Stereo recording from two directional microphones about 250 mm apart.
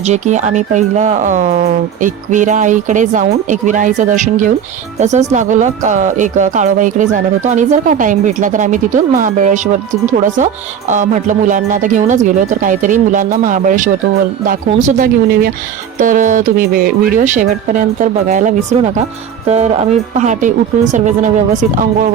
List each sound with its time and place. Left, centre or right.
0.0 s speech: right